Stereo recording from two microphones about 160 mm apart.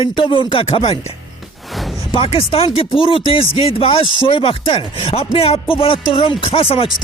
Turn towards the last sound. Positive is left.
turn(degrees=35)  # may be behind; listen again after turning